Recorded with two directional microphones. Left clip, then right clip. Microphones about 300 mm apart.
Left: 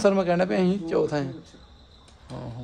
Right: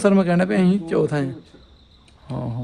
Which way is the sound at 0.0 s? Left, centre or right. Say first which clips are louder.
Right 3 dB; right.